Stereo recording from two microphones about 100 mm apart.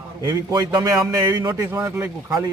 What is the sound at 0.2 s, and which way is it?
Speech, 40° right (ahead or behind).